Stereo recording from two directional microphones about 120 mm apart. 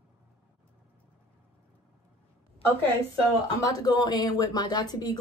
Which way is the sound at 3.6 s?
30° left (ahead or behind).